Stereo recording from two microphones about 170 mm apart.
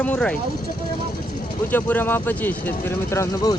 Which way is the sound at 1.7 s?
10° left (ahead or behind).